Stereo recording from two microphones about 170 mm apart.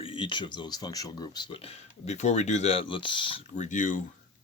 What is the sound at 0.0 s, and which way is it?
Speech, 30° left (ahead or behind).